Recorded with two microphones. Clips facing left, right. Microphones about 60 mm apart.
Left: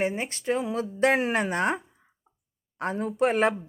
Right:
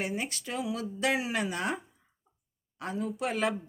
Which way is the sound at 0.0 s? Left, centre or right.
Left.